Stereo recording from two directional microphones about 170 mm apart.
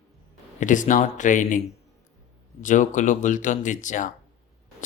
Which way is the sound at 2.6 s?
45° left (ahead or behind).